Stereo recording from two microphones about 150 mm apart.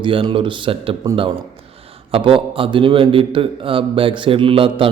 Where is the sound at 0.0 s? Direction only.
35° right (ahead or behind).